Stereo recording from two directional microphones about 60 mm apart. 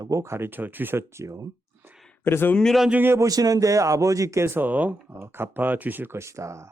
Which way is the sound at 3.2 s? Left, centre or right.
Right.